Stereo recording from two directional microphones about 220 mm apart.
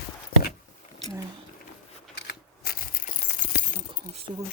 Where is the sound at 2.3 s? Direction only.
45° left (ahead or behind).